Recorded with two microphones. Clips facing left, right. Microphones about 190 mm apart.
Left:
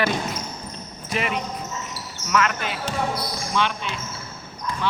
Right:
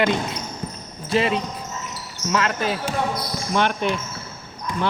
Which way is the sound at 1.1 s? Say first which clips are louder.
Right 5 dB; 30° right (ahead or behind).